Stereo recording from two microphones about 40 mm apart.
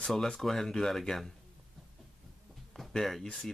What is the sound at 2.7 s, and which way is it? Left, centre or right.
Speech, centre.